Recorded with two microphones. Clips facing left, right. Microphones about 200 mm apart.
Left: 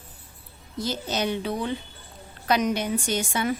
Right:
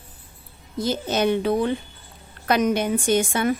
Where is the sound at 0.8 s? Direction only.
55° right (ahead or behind).